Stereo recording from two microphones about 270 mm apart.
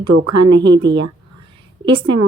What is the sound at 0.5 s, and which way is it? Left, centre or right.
Speech, right.